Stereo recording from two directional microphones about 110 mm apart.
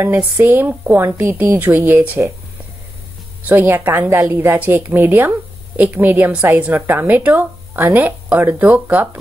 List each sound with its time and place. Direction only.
0.0 s speech: 20° right (ahead or behind)
3.4 s a woman's voice: 20° right (ahead or behind)